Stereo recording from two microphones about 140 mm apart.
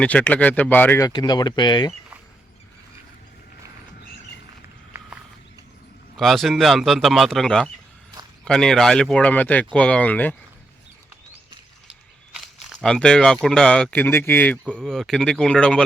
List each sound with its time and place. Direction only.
0.0 s speech: 10° left (ahead or behind)
1.0 s speech: 30° left (ahead or behind)
6.1 s speech: centre (ahead or behind)
12.8 s speech: 5° left (ahead or behind)